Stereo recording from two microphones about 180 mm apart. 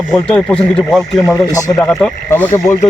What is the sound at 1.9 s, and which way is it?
Speech, 5° left (ahead or behind).